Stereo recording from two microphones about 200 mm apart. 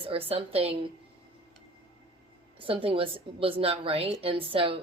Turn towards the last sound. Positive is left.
turn(degrees=-25)  # may be behind; listen again after turning